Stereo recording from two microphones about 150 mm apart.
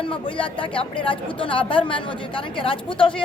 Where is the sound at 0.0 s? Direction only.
35° left (ahead or behind).